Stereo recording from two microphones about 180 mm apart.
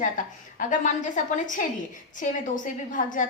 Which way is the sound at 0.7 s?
45° left (ahead or behind).